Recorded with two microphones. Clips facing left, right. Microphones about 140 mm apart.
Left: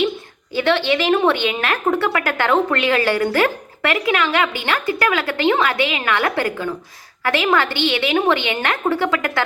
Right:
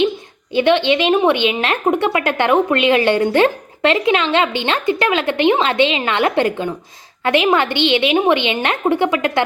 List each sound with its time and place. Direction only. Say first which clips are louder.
0.5 s speech: right 4 dB; 20° right (ahead or behind)